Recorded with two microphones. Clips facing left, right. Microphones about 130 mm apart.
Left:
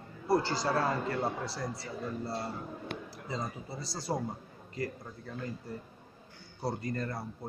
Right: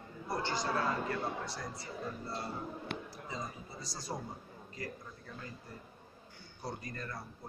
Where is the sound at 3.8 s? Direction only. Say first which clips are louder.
Left 7 dB; 30° left (ahead or behind).